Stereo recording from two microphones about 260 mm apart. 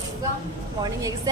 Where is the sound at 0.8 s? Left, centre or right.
Centre.